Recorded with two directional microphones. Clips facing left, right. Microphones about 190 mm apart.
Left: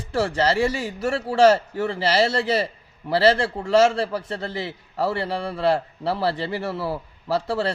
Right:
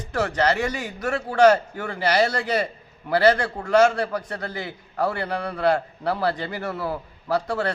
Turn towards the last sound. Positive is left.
turn(degrees=25)  # may be behind; listen again after turning